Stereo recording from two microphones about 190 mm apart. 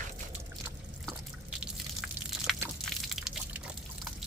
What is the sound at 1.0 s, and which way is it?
Drip, 5° right (ahead or behind).